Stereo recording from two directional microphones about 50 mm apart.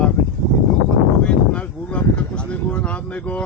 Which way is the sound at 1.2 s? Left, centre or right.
Left.